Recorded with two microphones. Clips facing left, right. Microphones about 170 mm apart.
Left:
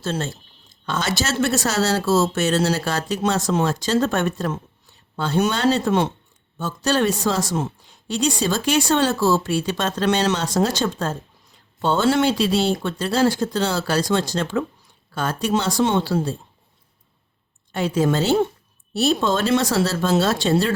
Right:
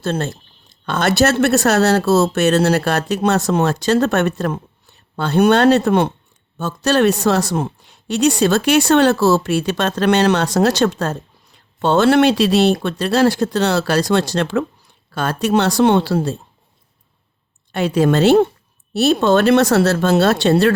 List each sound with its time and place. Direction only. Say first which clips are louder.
0.0 s speech: right 4 dB; 60° right (ahead or behind)
17.7 s speech: right 4 dB; 70° right (ahead or behind)